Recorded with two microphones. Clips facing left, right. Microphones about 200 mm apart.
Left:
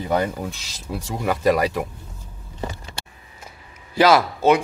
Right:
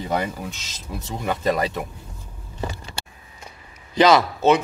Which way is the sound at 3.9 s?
5° left (ahead or behind).